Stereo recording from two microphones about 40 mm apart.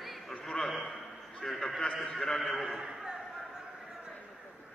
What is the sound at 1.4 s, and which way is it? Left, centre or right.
A man's voice, centre.